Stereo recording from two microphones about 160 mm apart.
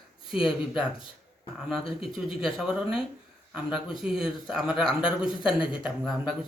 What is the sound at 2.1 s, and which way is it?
Speech, centre (ahead or behind).